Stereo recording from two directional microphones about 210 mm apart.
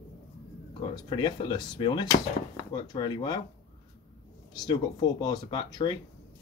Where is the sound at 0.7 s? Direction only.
20° left (ahead or behind).